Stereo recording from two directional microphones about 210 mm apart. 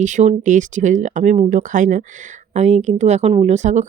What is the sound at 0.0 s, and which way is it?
Speech, 35° right (ahead or behind).